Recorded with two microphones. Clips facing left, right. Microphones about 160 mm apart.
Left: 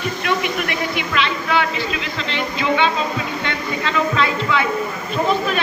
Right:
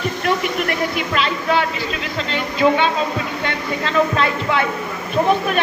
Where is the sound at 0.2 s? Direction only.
45° right (ahead or behind).